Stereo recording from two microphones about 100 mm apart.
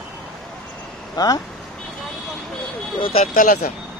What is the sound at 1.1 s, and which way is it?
Speech, 40° left (ahead or behind).